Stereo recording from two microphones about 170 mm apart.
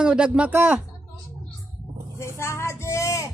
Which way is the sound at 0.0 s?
5° right (ahead or behind).